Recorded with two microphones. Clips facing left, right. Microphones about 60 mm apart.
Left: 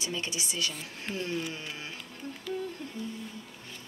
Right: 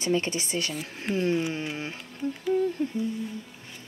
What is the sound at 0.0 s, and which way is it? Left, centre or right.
Speech, right.